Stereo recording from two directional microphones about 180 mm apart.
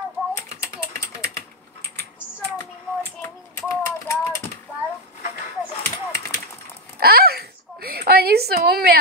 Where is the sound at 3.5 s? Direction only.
15° left (ahead or behind).